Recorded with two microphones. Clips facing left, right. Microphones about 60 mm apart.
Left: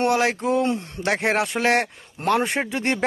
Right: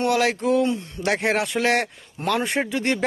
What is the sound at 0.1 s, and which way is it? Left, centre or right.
A man's voice, left.